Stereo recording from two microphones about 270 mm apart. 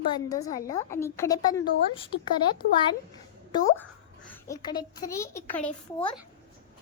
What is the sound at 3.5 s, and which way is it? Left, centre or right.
A woman's voice, centre.